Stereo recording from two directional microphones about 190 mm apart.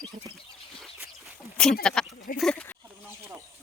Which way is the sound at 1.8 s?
5° left (ahead or behind).